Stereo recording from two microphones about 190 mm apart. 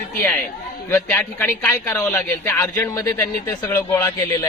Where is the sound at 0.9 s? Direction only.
10° left (ahead or behind).